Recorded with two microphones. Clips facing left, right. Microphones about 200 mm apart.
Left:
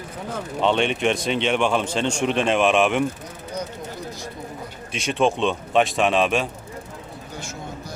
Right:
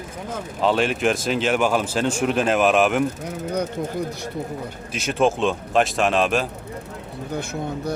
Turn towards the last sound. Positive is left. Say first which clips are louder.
# right 8 dB
turn(degrees=-60)  # may be behind; listen again after turning